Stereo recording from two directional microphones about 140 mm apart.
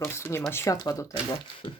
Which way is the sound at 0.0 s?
20° left (ahead or behind).